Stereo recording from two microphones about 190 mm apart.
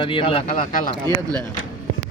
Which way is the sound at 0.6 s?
45° left (ahead or behind).